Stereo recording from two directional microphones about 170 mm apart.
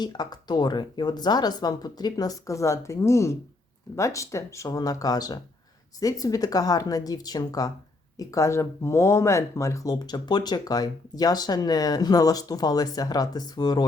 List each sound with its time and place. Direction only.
0.0 s speech: 25° left (ahead or behind)